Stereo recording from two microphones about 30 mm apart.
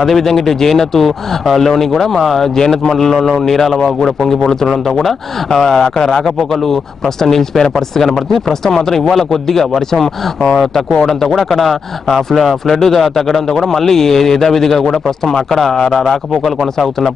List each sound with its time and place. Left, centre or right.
0.1 s a man's voice: centre
1.7 s a man's voice: centre
11.3 s a man's voice: centre